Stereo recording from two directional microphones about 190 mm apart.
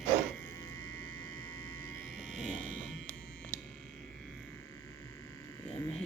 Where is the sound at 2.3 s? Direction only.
40° right (ahead or behind).